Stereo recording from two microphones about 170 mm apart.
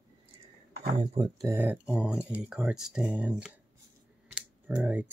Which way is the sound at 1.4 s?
10° right (ahead or behind).